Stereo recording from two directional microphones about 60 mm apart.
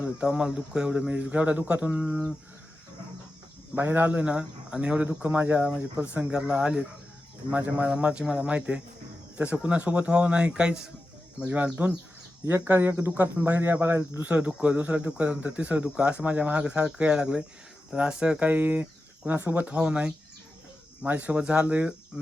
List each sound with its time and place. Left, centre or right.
0.0 s speech: centre
3.8 s speech: right
12.6 s speech: right
14.2 s speech: right
18.4 s speech: right